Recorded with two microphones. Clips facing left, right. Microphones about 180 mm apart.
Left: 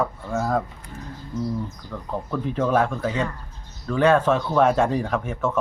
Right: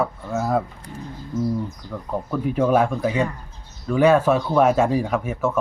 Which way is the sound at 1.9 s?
10° right (ahead or behind).